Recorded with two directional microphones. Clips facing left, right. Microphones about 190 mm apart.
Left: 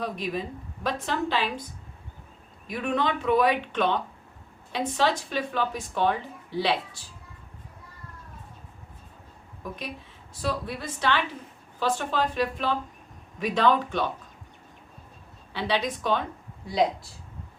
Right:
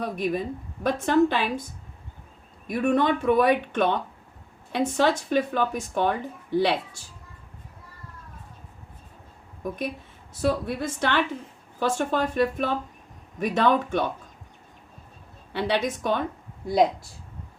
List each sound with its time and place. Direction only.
0.0 s speech: 50° right (ahead or behind)
2.6 s speech: 50° right (ahead or behind)
10.4 s speech: 50° right (ahead or behind)
15.5 s speech: 55° right (ahead or behind)